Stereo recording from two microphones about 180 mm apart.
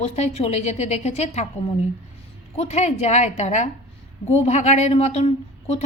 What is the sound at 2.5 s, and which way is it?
Speech, 35° left (ahead or behind).